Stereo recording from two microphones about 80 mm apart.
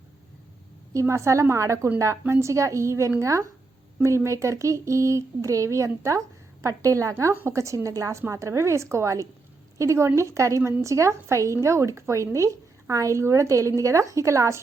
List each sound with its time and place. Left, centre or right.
0.9 s speech: right